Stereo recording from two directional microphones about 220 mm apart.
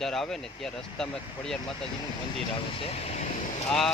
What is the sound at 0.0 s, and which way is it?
Speech, centre (ahead or behind).